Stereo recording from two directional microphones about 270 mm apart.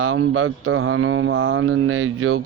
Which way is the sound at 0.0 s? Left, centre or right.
Right.